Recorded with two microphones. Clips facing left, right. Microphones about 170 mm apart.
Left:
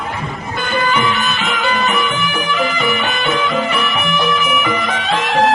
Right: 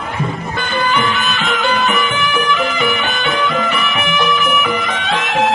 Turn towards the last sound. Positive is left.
turn(degrees=0)  # may be behind; listen again after turning